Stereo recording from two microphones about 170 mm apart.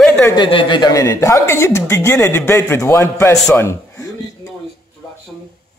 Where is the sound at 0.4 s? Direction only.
30° left (ahead or behind).